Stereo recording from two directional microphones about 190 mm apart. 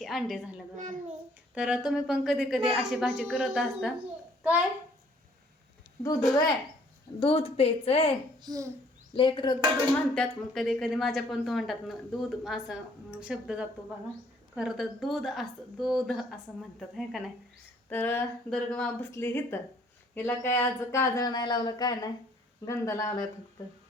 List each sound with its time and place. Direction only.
0.0 s a woman's voice: centre (ahead or behind)
0.8 s a child's voice: 40° right (ahead or behind)
1.5 s speech: 5° right (ahead or behind)
6.0 s speech: 20° left (ahead or behind)
7.2 s a woman's voice: 30° left (ahead or behind)
8.4 s a child's voice: 20° right (ahead or behind)
9.1 s speech: 25° left (ahead or behind)
10.2 s speech: centre (ahead or behind)
17.8 s speech: 10° left (ahead or behind)